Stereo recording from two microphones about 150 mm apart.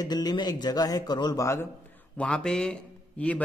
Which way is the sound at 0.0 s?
25° left (ahead or behind).